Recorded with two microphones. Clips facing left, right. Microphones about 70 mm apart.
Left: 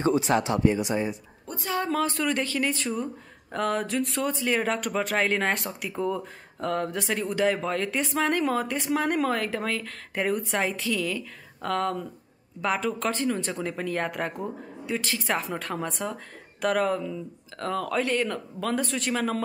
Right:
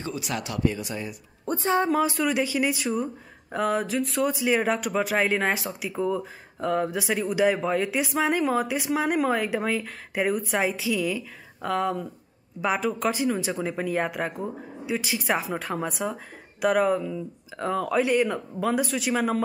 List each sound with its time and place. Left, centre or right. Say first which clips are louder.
0.0 s speech: left 8 dB; left
1.4 s a woman's voice: right 6 dB; right
1.9 s speech: right 3 dB; centre